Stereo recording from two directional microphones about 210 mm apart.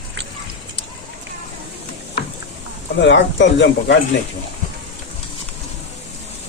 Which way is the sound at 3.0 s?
60° left (ahead or behind).